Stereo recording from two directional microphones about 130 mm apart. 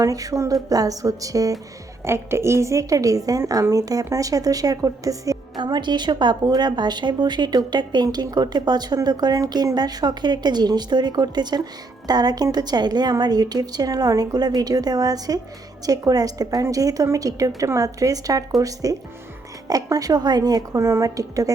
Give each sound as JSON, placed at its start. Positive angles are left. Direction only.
{"t": 0.0, "sound": "a woman's voice", "side_deg": -25}